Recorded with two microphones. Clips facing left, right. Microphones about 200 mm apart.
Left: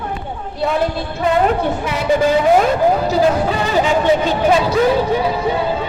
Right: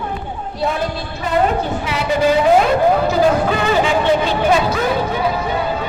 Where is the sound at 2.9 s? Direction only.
35° left (ahead or behind).